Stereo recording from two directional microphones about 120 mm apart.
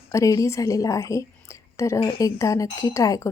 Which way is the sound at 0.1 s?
25° left (ahead or behind).